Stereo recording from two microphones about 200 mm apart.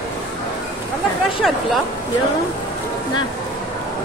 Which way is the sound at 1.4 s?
Centre (ahead or behind).